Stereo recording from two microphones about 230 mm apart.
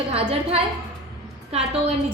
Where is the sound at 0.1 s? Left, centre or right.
Right.